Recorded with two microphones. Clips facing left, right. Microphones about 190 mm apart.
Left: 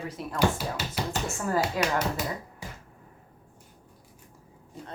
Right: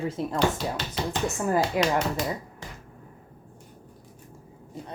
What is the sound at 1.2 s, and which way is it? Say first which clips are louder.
Speech: right 6 dB; 20° right (ahead or behind).